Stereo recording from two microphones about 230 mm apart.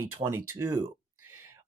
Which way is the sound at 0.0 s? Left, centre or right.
Centre.